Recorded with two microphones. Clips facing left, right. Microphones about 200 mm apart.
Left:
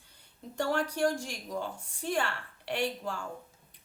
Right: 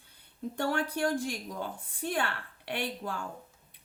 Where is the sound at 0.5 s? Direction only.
55° right (ahead or behind).